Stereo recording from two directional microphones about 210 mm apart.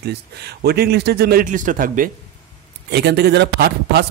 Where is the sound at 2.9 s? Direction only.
50° right (ahead or behind).